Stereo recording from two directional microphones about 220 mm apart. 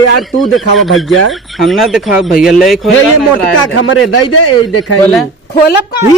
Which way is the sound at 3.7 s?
70° left (ahead or behind).